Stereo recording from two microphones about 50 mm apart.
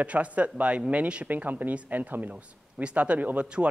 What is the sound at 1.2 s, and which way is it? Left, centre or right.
A man's voice, right.